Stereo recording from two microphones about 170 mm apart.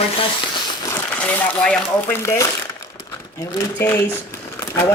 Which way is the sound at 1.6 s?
5° left (ahead or behind).